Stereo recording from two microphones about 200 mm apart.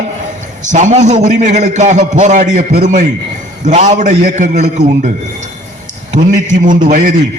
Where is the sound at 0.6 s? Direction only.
40° right (ahead or behind).